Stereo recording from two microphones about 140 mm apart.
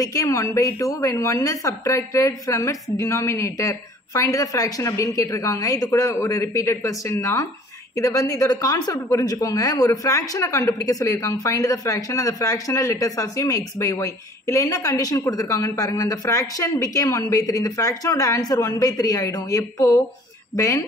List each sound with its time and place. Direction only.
0.0 s speech: 25° left (ahead or behind)